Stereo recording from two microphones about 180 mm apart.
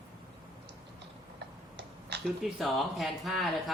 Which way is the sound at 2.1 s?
70° right (ahead or behind).